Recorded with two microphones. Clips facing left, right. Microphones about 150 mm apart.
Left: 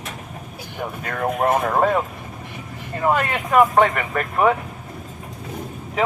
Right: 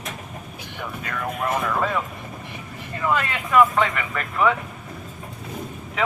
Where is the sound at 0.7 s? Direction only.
45° left (ahead or behind).